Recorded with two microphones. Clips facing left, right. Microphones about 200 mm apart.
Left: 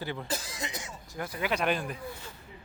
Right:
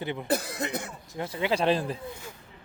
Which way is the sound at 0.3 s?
60° right (ahead or behind).